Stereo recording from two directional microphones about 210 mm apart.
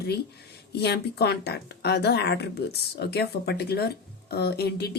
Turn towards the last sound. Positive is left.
turn(degrees=50)  # may be behind; listen again after turning